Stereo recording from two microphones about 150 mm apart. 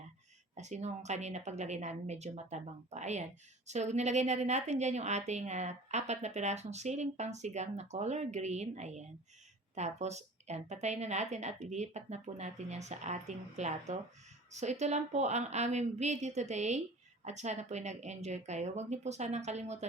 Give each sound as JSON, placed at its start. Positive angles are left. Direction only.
{"t": 0.5, "sound": "a woman's voice", "side_deg": -50}